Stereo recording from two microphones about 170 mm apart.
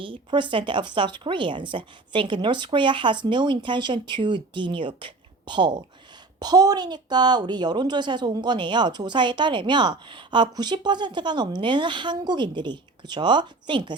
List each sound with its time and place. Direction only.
0.0 s a woman's voice: 30° right (ahead or behind)